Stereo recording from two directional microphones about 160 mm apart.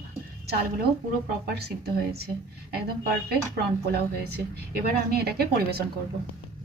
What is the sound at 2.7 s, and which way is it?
A woman's voice, 75° right (ahead or behind).